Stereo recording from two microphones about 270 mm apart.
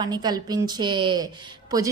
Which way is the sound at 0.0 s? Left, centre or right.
Centre.